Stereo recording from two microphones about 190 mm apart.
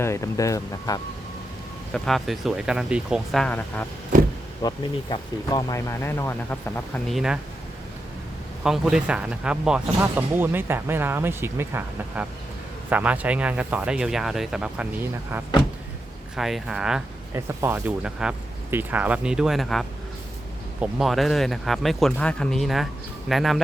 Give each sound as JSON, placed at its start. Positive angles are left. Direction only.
{"t": 0.0, "sound": "speech", "side_deg": 15}
{"t": 1.9, "sound": "speech", "side_deg": 0}
{"t": 4.6, "sound": "speech", "side_deg": 25}
{"t": 7.1, "sound": "speech", "side_deg": 0}
{"t": 8.6, "sound": "speech", "side_deg": -5}
{"t": 20.8, "sound": "speech", "side_deg": 0}